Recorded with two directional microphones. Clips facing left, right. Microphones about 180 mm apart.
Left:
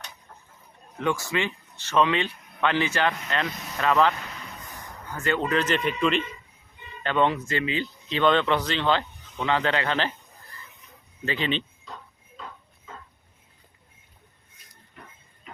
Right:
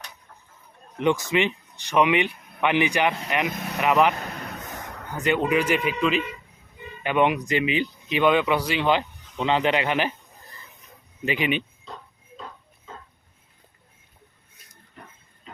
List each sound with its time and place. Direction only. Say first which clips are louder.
0.9 s speech: right 5 dB; 20° right (ahead or behind)
3.5 s speech: right 7 dB; 55° right (ahead or behind)
3.8 s speech: right 2 dB; 15° right (ahead or behind)
4.2 s a sound: right 6 dB; 55° right (ahead or behind); by 5.0 s 80° right
5.1 s speech: right 3 dB; 15° right (ahead or behind)
11.3 s speech: right 3 dB; 15° right (ahead or behind)